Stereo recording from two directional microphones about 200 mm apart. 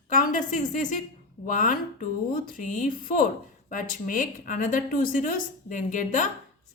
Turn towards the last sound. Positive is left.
turn(degrees=40)  # may be behind; listen again after turning